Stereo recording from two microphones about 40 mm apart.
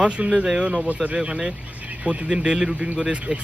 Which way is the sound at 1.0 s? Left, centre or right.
Centre.